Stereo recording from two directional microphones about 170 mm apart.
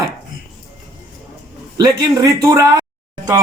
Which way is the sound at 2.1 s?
20° right (ahead or behind).